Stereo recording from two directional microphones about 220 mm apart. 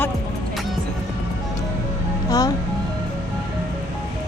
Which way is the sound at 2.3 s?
15° left (ahead or behind).